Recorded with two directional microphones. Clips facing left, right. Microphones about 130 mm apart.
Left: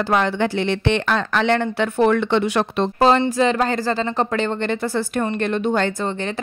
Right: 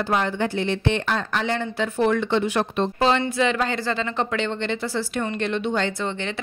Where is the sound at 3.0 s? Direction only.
40° left (ahead or behind).